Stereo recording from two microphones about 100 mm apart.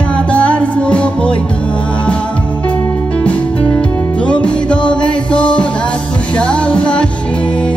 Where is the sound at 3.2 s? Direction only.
10° left (ahead or behind).